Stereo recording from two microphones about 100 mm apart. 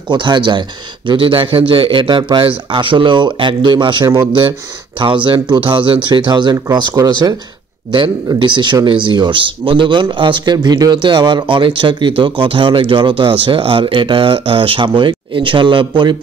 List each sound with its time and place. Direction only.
0.1 s speech: 50° right (ahead or behind)
8.4 s speech: 50° right (ahead or behind)